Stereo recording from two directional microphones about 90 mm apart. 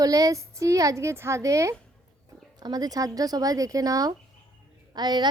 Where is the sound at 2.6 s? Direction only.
45° right (ahead or behind).